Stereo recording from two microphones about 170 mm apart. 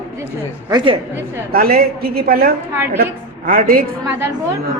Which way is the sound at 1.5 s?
60° right (ahead or behind).